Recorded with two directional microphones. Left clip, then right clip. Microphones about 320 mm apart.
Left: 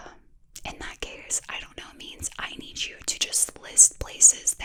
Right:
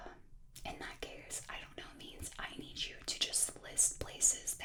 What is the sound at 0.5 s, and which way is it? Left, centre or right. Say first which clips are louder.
Whispering: left 9 dB; left.